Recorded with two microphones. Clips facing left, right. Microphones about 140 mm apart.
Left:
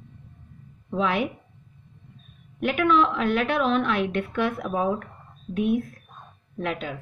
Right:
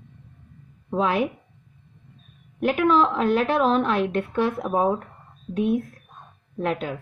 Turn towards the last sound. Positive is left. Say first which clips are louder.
# right 4 dB
turn(degrees=-40)  # may be behind; listen again after turning